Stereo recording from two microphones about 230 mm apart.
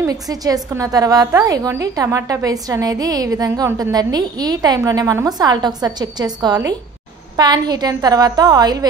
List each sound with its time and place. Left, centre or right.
0.0 s a woman's voice: centre